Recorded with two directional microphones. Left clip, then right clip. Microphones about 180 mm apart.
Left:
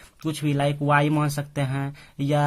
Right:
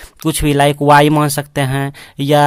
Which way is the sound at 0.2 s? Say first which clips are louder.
Right 12 dB; 55° right (ahead or behind).